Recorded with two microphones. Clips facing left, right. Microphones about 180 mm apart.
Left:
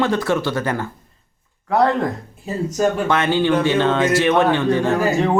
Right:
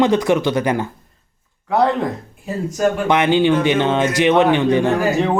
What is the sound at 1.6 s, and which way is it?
Speech, centre (ahead or behind).